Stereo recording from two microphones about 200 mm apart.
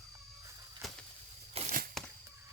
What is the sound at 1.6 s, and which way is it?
Crushing, 30° right (ahead or behind).